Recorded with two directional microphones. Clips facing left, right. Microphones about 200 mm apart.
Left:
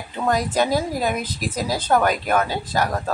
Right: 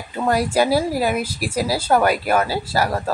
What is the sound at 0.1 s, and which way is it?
A woman's voice, 10° right (ahead or behind).